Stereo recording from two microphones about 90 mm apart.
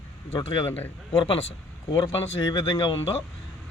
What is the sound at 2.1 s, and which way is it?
Speech, 60° left (ahead or behind).